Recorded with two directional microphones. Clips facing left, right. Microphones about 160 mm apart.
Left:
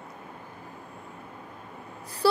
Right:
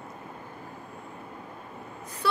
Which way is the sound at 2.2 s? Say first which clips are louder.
Left 5 dB; 35° left (ahead or behind).